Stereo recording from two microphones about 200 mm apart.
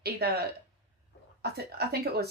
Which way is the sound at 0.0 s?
50° right (ahead or behind).